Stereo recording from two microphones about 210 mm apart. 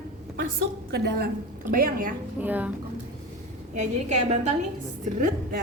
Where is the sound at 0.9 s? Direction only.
50° right (ahead or behind).